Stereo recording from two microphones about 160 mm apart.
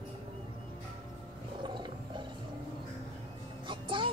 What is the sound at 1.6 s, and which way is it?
Roar, 30° right (ahead or behind).